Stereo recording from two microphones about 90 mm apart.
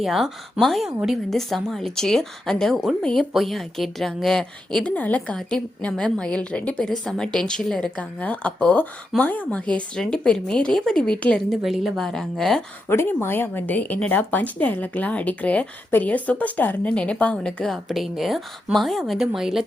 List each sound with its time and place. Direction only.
0.0 s a woman's voice: centre (ahead or behind)
12.9 s speech: 25° left (ahead or behind); by 19.6 s 5° right (ahead or behind)